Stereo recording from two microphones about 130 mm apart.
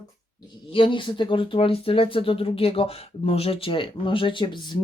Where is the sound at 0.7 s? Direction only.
40° left (ahead or behind).